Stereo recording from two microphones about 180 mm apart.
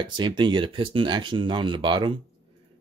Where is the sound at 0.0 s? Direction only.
25° right (ahead or behind).